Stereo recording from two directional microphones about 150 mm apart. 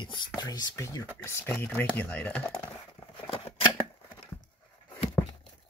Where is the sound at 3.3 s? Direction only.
35° left (ahead or behind).